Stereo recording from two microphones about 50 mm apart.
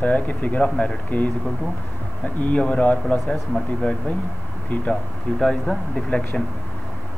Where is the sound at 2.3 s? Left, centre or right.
Left.